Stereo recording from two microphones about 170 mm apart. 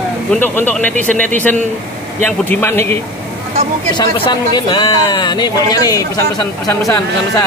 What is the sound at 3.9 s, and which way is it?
Speech, 30° left (ahead or behind).